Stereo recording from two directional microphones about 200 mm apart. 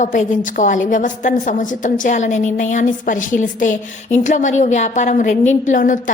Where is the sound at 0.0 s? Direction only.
40° left (ahead or behind).